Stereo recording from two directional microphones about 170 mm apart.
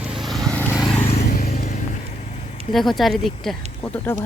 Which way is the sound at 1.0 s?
35° left (ahead or behind).